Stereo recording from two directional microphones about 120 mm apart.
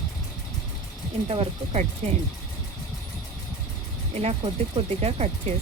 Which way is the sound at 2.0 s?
70° right (ahead or behind).